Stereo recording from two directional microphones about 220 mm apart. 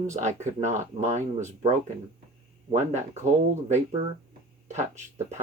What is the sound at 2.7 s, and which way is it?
Speech, 30° right (ahead or behind).